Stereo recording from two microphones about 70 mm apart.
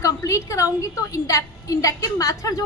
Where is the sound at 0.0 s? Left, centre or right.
Left.